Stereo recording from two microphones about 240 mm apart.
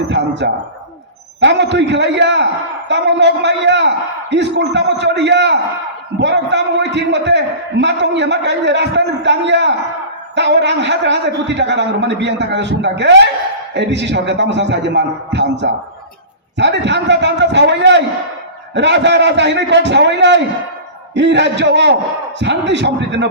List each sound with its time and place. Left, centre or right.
0.1 s a man's voice: right